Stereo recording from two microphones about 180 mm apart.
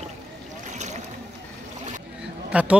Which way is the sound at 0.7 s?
40° right (ahead or behind).